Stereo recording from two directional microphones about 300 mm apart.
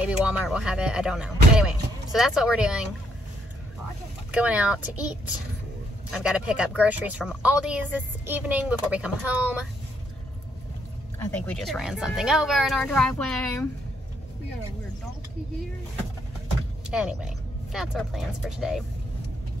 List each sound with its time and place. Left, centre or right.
0.0 s speech: centre
4.3 s speech: centre
6.0 s speech: centre
11.1 s speech: centre
16.9 s speech: centre